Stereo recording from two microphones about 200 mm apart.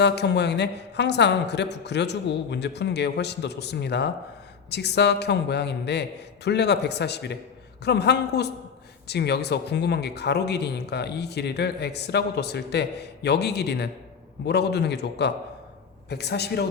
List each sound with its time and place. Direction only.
0.0 s speech: 60° left (ahead or behind)